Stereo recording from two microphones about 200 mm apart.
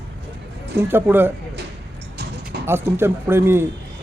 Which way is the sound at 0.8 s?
10° right (ahead or behind).